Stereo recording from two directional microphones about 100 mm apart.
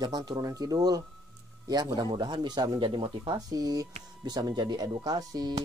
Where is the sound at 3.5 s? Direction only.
40° right (ahead or behind).